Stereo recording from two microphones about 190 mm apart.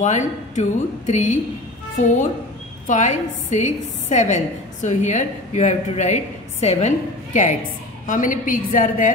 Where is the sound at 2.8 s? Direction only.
40° left (ahead or behind).